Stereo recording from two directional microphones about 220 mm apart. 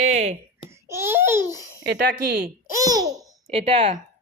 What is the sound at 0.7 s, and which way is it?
Babbling, 10° right (ahead or behind).